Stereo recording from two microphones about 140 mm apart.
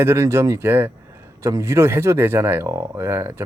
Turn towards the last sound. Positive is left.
turn(degrees=-15)  # may be behind; listen again after turning